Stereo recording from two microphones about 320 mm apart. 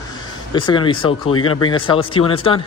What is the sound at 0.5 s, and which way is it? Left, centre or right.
Speech, centre.